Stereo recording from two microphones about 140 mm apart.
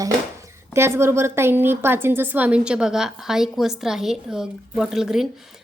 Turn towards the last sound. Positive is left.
turn(degrees=-5)  # may be behind; listen again after turning